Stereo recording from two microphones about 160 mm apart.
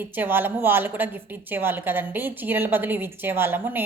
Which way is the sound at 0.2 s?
10° right (ahead or behind).